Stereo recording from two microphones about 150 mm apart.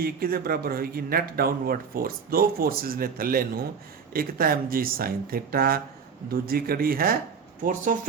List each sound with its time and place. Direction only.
0.0 s speech: 85° right
7.6 s speech: 65° right (ahead or behind)